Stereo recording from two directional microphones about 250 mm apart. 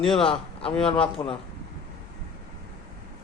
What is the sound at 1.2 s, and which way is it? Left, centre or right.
Speech, centre.